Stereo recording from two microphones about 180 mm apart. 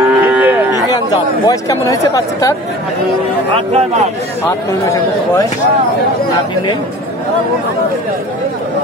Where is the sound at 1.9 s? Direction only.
20° left (ahead or behind).